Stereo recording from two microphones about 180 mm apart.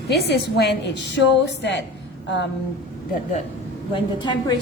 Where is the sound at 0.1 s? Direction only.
65° left (ahead or behind).